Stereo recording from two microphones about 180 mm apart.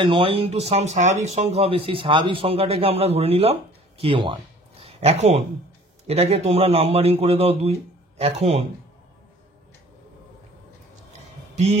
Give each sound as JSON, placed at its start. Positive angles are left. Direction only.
{"t": 0.0, "sound": "speech", "side_deg": -30}
{"t": 11.5, "sound": "music", "side_deg": -40}